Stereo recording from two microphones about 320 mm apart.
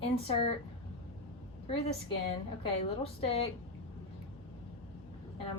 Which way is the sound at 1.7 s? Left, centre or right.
Centre.